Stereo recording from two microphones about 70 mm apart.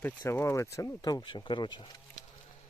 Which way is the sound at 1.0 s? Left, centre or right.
Left.